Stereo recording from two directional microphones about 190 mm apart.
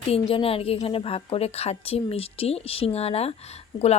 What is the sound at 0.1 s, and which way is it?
A woman's voice, 30° left (ahead or behind).